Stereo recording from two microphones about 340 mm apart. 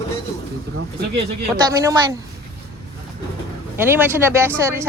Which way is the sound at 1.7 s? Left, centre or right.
Centre.